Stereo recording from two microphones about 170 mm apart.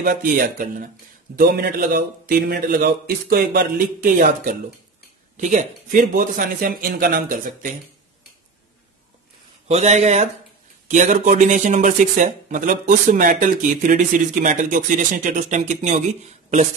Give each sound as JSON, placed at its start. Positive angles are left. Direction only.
{"t": 0.0, "sound": "speech", "side_deg": -55}
{"t": 9.7, "sound": "speech", "side_deg": -40}